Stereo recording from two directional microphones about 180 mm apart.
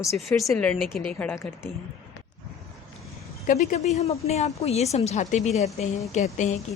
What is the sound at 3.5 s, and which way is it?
A woman's voice, 45° left (ahead or behind).